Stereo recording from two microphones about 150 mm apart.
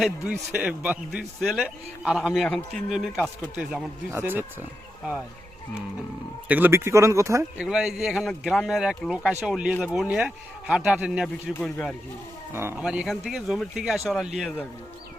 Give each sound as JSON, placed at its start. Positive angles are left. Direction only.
{"t": 0.5, "sound": "a man's voice", "side_deg": -10}
{"t": 6.5, "sound": "speech", "side_deg": -15}
{"t": 7.6, "sound": "a man's voice", "side_deg": -5}
{"t": 11.6, "sound": "speech", "side_deg": 5}
{"t": 12.8, "sound": "a man's voice", "side_deg": -5}